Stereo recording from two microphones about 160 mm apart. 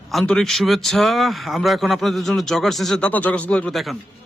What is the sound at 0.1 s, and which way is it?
A man's voice, centre (ahead or behind).